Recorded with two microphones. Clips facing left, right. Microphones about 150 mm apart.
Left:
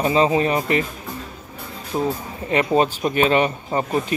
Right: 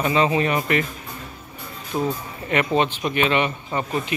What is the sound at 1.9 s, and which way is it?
Speech, 20° left (ahead or behind).